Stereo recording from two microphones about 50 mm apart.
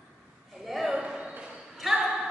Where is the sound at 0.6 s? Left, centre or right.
Centre.